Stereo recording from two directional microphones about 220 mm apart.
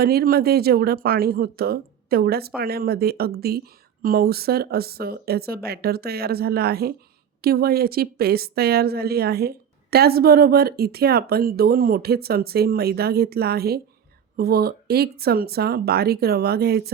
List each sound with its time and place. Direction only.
0.0 s a woman's voice: 45° right (ahead or behind)